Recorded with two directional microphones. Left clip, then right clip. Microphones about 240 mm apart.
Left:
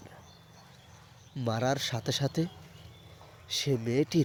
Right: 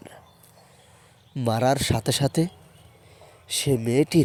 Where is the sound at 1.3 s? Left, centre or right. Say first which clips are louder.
Right 8 dB; right.